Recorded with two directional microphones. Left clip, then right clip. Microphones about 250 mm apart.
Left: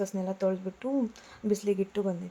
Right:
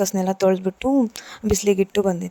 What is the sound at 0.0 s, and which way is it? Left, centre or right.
A woman's voice, right.